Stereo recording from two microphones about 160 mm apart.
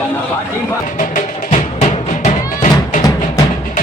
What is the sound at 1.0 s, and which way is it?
Music, 50° left (ahead or behind).